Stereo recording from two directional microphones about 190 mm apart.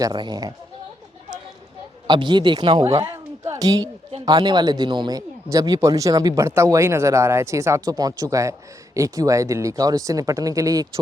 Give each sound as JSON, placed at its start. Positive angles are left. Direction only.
{"t": 0.0, "sound": "speech", "side_deg": -20}
{"t": 2.0, "sound": "a woman's voice", "side_deg": -25}